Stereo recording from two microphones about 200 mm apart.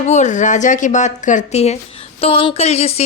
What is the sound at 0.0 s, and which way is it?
A woman's voice, 35° left (ahead or behind).